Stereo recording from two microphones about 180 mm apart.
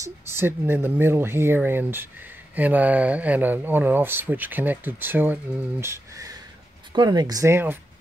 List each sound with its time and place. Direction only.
0.0 s speech: 15° right (ahead or behind)